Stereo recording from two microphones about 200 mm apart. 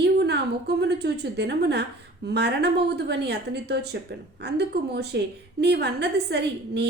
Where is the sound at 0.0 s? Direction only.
55° right (ahead or behind).